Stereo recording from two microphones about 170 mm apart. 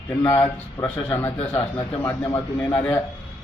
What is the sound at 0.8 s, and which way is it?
A man's voice, 15° left (ahead or behind).